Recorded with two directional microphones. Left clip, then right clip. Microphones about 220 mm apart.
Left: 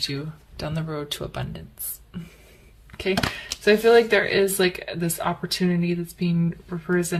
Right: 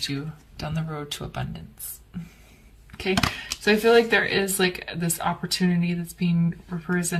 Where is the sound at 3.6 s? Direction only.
25° left (ahead or behind).